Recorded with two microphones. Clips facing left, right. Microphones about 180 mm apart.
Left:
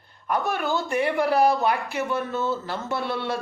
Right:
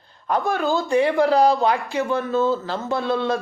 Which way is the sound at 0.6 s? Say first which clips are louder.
Right 5 dB; 15° right (ahead or behind).